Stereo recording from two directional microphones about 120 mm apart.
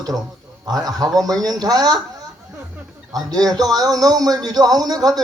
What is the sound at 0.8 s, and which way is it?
A man's voice, 30° right (ahead or behind).